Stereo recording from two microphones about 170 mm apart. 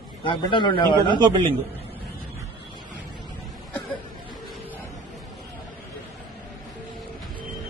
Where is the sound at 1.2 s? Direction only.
30° right (ahead or behind).